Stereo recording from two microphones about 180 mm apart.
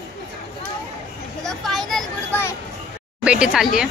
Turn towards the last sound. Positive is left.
turn(degrees=-5)  # may be behind; listen again after turning